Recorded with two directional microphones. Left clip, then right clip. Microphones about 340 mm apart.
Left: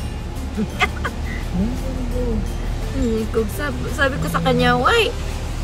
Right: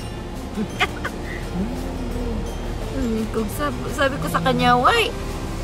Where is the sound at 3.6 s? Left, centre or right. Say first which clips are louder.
Left 1 dB; centre.